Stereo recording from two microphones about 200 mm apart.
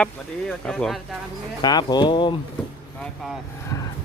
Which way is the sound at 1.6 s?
20° left (ahead or behind).